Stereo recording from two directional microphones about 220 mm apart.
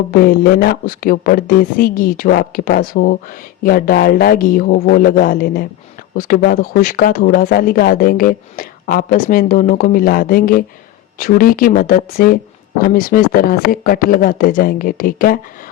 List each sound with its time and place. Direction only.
0.1 s speech: 40° left (ahead or behind)